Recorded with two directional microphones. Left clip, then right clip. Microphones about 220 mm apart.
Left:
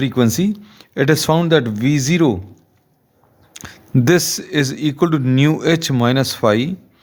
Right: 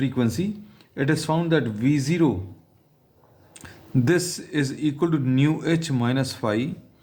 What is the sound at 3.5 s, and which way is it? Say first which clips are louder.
Speech: left 7 dB; 45° left (ahead or behind).